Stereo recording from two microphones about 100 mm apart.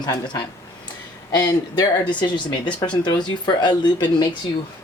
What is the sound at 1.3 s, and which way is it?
Speech, 40° left (ahead or behind).